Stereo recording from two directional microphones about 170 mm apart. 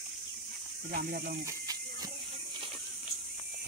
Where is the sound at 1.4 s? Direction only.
20° right (ahead or behind).